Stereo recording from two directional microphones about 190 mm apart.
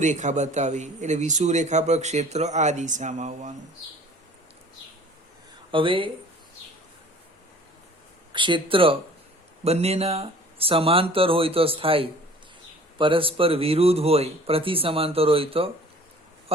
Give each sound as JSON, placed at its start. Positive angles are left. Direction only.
{"t": 0.0, "sound": "speech", "side_deg": -40}
{"t": 5.7, "sound": "speech", "side_deg": -25}
{"t": 8.3, "sound": "speech", "side_deg": -25}